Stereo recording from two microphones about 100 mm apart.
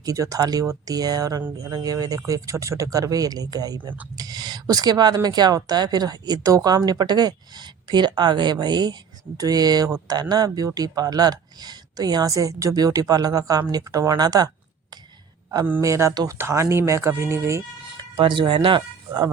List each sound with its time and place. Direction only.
0.0 s speech: 35° right (ahead or behind)
15.8 s speech: 30° right (ahead or behind)
18.2 s speech: 50° right (ahead or behind)